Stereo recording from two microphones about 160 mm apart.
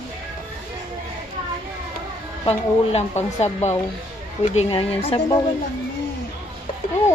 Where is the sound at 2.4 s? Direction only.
40° left (ahead or behind).